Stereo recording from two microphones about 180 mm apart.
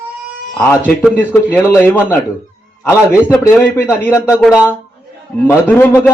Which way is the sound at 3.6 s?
15° left (ahead or behind).